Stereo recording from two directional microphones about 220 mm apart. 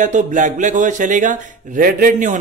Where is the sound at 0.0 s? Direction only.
35° right (ahead or behind).